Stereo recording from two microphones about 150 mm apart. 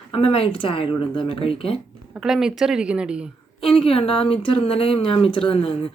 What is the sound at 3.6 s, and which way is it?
A woman's voice, 35° left (ahead or behind).